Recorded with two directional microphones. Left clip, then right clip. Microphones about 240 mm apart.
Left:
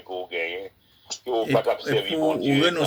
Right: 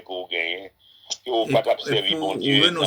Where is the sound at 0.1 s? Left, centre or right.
Right.